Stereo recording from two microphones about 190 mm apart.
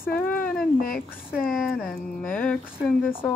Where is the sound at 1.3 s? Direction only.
Centre (ahead or behind).